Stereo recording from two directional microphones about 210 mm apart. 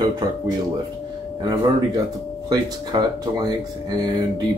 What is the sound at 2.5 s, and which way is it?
Speech, 20° right (ahead or behind).